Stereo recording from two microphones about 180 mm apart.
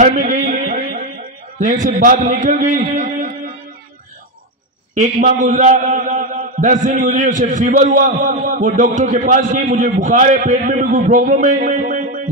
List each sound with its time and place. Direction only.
0.0 s a sound: 45° right (ahead or behind)
1.6 s a man's voice: 45° right (ahead or behind)
4.9 s a man's voice: 45° right (ahead or behind)